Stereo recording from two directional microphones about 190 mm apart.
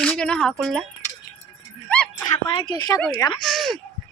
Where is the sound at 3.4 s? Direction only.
Centre (ahead or behind).